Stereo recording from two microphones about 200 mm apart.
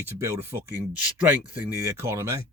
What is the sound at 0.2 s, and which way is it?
Speech, 10° right (ahead or behind).